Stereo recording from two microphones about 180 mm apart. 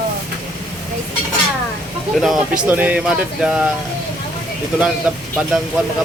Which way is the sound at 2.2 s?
5° right (ahead or behind).